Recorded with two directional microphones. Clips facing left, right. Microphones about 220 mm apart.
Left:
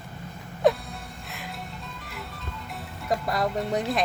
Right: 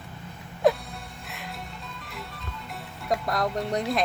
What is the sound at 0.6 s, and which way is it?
Music, centre (ahead or behind).